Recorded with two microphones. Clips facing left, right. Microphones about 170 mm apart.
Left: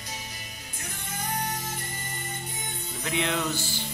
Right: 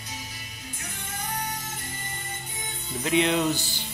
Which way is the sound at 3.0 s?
20° right (ahead or behind).